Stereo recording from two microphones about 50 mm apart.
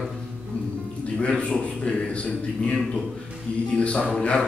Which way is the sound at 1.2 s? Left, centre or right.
Left.